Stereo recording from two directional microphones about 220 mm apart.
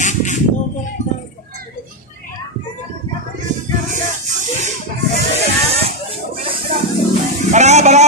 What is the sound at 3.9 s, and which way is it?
Music, 35° right (ahead or behind).